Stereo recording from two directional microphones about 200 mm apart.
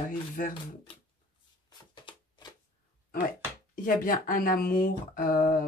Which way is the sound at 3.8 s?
45° left (ahead or behind).